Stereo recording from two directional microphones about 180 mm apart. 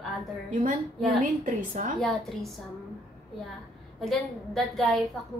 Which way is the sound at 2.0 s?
Centre (ahead or behind).